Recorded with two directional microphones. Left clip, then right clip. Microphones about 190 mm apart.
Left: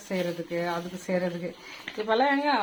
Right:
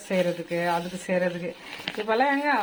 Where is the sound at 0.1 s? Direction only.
25° right (ahead or behind).